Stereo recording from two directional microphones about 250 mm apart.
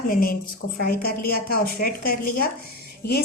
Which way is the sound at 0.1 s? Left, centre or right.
Left.